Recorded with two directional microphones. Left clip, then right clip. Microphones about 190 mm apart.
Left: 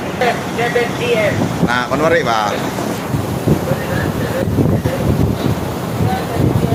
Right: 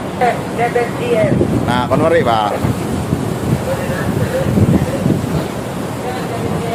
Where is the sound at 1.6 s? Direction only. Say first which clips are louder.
Left 1 dB; 20° right (ahead or behind).